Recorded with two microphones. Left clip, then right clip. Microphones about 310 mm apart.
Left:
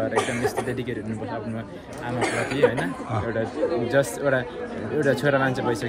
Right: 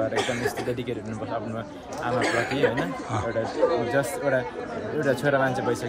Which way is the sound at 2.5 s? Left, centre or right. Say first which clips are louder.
Left 3 dB; centre.